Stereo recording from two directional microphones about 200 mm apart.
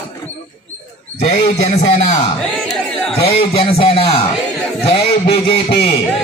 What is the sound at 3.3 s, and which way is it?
A man's voice, 25° left (ahead or behind).